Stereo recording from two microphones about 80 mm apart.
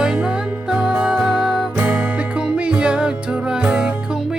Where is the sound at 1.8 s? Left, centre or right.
Right.